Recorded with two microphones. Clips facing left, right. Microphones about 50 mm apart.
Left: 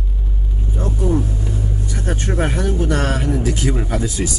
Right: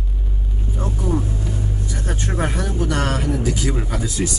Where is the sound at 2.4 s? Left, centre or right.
Left.